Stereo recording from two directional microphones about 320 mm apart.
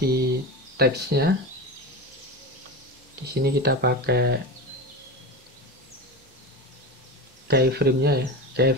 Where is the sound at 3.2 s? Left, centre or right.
Right.